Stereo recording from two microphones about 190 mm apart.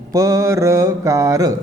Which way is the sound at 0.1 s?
20° right (ahead or behind).